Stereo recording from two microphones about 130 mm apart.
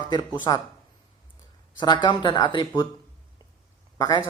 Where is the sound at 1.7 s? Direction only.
35° left (ahead or behind).